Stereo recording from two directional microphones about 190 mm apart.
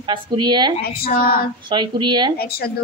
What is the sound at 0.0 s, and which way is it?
Speech, 25° right (ahead or behind).